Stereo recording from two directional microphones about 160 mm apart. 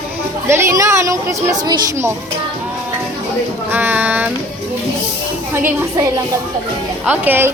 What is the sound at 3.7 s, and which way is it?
Speech, 10° right (ahead or behind).